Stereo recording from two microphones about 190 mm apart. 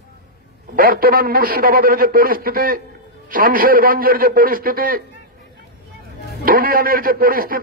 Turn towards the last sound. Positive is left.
turn(degrees=-50)  # may be behind; listen again after turning